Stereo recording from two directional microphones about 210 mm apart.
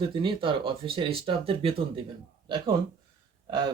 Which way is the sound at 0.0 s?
25° right (ahead or behind).